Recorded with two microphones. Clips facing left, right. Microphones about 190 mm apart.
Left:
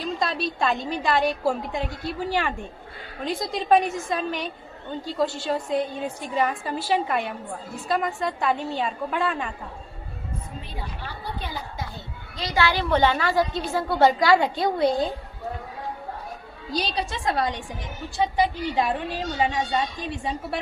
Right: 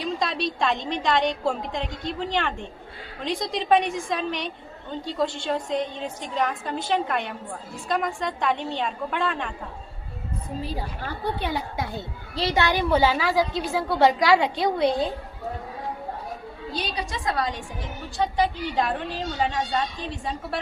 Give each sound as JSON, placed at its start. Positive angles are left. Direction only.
{"t": 0.0, "sound": "a woman's voice", "side_deg": 0}
{"t": 10.6, "sound": "a woman's voice", "side_deg": -35}
{"t": 11.3, "sound": "a woman's voice", "side_deg": -65}
{"t": 12.4, "sound": "a woman's voice", "side_deg": -25}
{"t": 12.9, "sound": "a woman's voice", "side_deg": -5}
{"t": 16.7, "sound": "a woman's voice", "side_deg": 35}
{"t": 18.2, "sound": "a woman's voice", "side_deg": 10}